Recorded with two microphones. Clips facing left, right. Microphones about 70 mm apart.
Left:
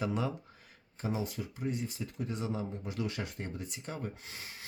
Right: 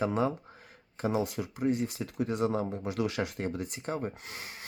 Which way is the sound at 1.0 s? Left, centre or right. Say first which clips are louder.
Right 6 dB; right.